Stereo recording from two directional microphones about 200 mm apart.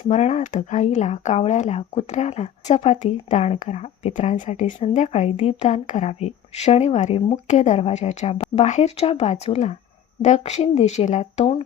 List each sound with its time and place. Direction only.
0.1 s speech: 35° left (ahead or behind)